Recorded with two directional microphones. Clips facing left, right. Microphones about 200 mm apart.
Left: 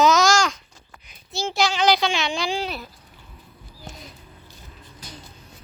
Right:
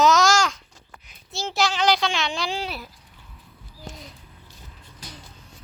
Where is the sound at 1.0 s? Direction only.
Centre (ahead or behind).